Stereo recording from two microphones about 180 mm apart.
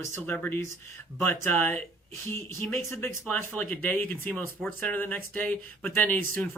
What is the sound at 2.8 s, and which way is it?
Speech, 15° left (ahead or behind).